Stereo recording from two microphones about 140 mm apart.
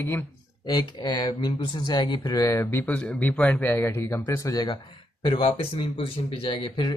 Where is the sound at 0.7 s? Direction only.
30° left (ahead or behind).